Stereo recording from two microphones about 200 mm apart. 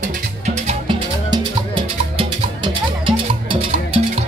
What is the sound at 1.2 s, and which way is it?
Music, 25° right (ahead or behind).